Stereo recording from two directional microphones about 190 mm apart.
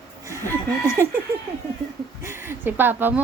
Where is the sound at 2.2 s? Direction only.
15° right (ahead or behind).